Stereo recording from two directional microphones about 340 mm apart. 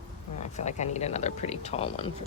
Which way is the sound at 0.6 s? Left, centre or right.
Centre.